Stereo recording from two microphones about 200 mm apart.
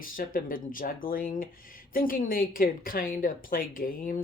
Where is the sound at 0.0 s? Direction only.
45° left (ahead or behind).